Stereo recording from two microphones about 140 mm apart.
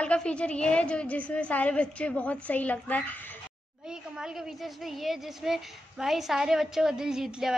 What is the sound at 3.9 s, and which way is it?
A woman's voice, 5° right (ahead or behind).